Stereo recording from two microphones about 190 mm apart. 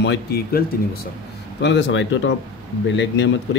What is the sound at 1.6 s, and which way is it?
Speech, 65° left (ahead or behind).